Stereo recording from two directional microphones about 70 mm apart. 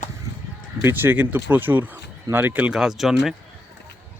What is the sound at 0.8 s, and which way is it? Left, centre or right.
Speech, right.